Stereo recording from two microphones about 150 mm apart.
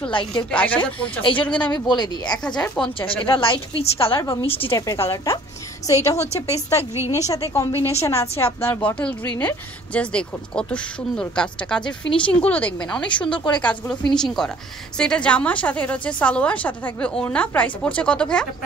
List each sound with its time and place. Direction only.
0.1 s a woman's voice: 30° left (ahead or behind)
0.5 s speech: 10° left (ahead or behind)
1.7 s speech: 30° left (ahead or behind)
2.4 s speech: 5° left (ahead or behind)
3.0 s a woman's voice: 35° left (ahead or behind)
4.6 s speech: 20° left (ahead or behind)
6.3 s a woman's voice: 45° left (ahead or behind)
7.1 s speech: 20° left (ahead or behind)
13.3 s a woman's voice: 30° left (ahead or behind)
13.6 s a woman's voice: 10° left (ahead or behind)